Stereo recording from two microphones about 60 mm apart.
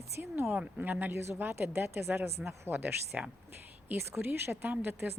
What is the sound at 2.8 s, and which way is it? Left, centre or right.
Speech, right.